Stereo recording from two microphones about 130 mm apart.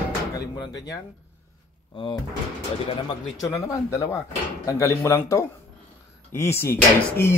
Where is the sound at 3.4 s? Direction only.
25° left (ahead or behind).